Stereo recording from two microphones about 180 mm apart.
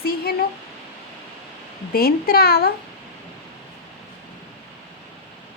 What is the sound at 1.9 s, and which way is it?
Speech, 55° left (ahead or behind).